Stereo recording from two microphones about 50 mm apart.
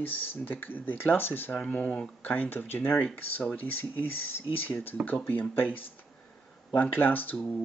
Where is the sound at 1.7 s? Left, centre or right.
Left.